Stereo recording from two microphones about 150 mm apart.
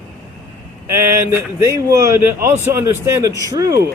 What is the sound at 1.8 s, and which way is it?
A man's voice, 15° right (ahead or behind).